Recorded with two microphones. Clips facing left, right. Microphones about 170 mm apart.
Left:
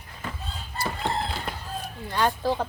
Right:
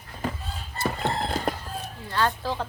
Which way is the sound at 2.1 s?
15° left (ahead or behind).